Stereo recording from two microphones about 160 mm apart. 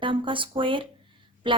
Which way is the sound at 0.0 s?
30° right (ahead or behind).